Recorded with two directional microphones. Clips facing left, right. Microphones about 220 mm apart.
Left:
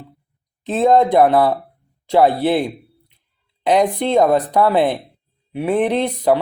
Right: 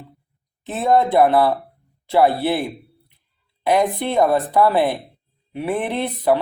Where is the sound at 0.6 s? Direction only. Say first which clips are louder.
Left 4 dB; 15° left (ahead or behind).